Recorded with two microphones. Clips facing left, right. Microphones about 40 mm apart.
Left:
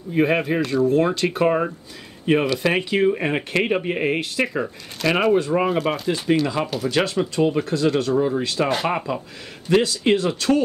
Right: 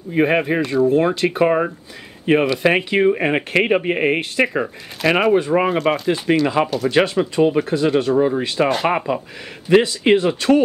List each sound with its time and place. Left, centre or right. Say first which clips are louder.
0.1 s speech: right 3 dB; centre
2.3 s speech: right 4 dB; right
5.7 s speech: right 3 dB; centre
6.0 s speech: right 3 dB; centre